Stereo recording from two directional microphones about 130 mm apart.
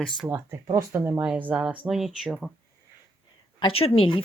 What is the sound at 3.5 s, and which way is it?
Speech, 45° left (ahead or behind).